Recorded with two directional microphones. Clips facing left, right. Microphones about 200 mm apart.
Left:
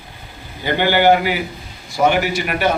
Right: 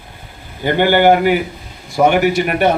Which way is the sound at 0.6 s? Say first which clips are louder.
Right 3 dB; 50° right (ahead or behind).